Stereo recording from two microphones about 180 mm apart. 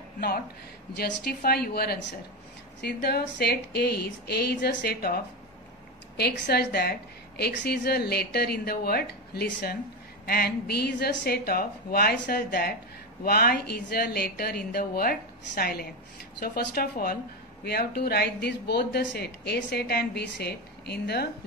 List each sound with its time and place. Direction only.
0.9 s a woman's voice: 60° left (ahead or behind)